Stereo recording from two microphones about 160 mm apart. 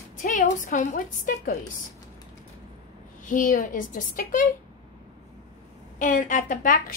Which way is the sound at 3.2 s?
55° left (ahead or behind).